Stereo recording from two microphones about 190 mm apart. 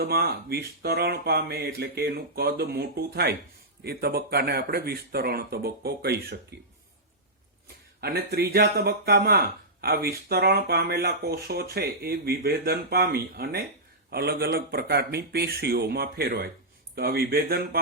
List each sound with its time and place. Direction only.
0.0 s speech: 55° right (ahead or behind)
8.0 s speech: 55° right (ahead or behind)